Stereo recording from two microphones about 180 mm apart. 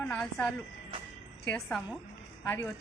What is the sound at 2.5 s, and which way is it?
Speech, 15° left (ahead or behind).